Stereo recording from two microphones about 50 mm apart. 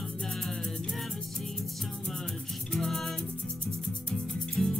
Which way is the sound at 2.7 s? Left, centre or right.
Centre.